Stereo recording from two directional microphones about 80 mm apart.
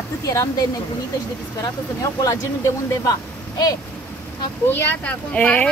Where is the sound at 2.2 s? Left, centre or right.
Left.